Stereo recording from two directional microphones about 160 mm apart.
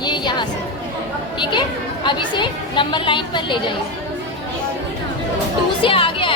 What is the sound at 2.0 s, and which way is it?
A woman's voice, 30° left (ahead or behind).